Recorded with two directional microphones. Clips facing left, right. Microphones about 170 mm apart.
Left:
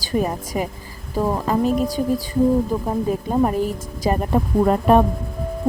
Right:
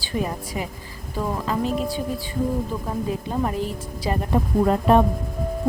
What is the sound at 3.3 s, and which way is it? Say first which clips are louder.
Speech: left 8 dB; 40° left (ahead or behind).